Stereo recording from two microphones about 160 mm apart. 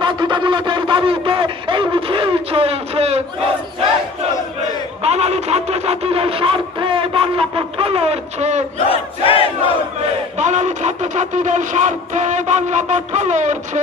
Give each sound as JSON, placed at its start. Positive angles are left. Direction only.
{"t": 0.0, "sound": "a sound", "side_deg": -30}
{"t": 5.0, "sound": "speech", "side_deg": -40}
{"t": 8.7, "sound": "crowd", "side_deg": 35}
{"t": 10.3, "sound": "speech", "side_deg": -45}